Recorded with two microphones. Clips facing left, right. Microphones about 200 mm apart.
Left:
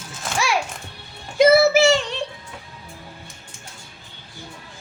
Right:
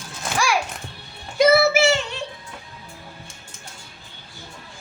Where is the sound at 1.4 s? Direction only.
35° left (ahead or behind).